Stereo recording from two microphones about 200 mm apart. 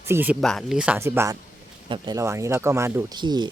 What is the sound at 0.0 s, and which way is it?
Speech, 10° right (ahead or behind).